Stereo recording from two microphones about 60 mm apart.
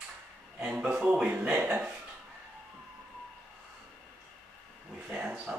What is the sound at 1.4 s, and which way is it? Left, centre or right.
Speech, right.